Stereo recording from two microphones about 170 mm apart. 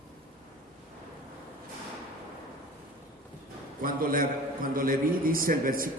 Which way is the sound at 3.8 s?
55° right (ahead or behind).